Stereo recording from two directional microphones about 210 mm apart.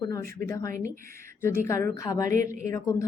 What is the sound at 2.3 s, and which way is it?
Speech, 40° right (ahead or behind).